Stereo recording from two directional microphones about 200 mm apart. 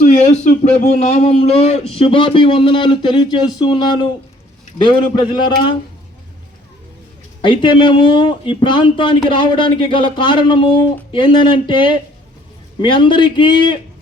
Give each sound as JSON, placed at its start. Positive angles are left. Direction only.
{"t": 0.0, "sound": "speech", "side_deg": 35}
{"t": 7.4, "sound": "speech", "side_deg": 25}